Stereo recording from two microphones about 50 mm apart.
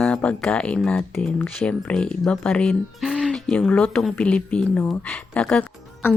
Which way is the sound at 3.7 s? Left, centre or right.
Left.